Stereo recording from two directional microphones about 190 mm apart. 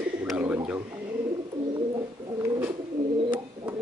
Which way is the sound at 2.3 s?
15° right (ahead or behind).